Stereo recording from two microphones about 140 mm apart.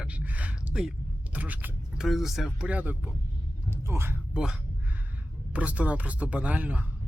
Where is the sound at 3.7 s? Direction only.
20° right (ahead or behind).